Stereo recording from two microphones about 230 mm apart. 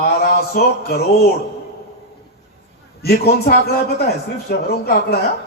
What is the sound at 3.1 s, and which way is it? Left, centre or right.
A man's voice, left.